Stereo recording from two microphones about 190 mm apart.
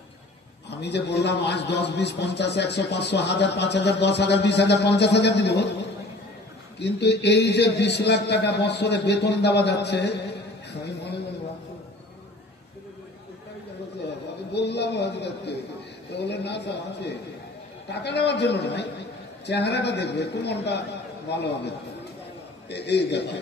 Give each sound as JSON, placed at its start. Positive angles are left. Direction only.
{"t": 0.7, "sound": "a man's voice", "side_deg": 65}
{"t": 6.8, "sound": "a man's voice", "side_deg": 65}
{"t": 14.5, "sound": "a man's voice", "side_deg": 65}